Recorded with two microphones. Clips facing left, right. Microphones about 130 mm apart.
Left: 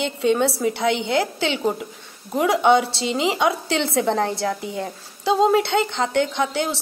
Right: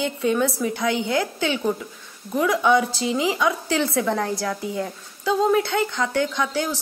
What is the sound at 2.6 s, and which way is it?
Speech, 25° left (ahead or behind).